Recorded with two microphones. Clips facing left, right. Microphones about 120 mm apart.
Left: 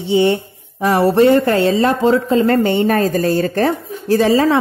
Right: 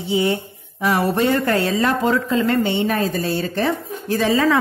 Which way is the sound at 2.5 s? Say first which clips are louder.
Left 5 dB; 45° left (ahead or behind).